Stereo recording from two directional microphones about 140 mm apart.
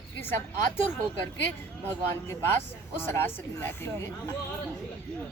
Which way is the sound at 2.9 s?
15° left (ahead or behind).